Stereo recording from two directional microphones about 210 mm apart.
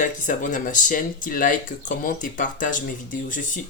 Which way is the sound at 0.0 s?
40° left (ahead or behind).